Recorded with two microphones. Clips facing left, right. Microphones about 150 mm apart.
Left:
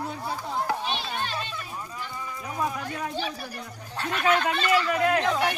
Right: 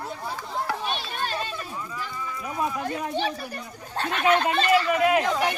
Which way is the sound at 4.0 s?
55° right (ahead or behind).